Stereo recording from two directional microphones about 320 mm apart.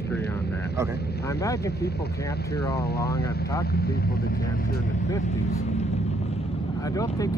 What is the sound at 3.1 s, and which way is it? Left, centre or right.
Speech, left.